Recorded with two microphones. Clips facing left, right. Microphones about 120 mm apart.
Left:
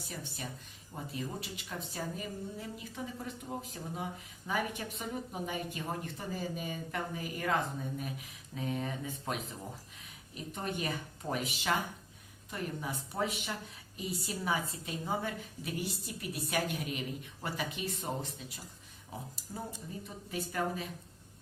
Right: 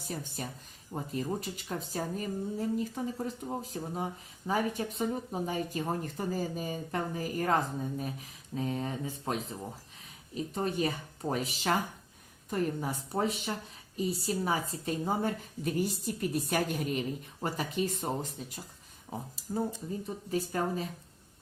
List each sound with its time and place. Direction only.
0.0 s speech: 40° right (ahead or behind)